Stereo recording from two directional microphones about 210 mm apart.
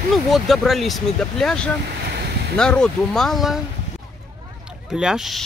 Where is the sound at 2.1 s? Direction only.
50° right (ahead or behind).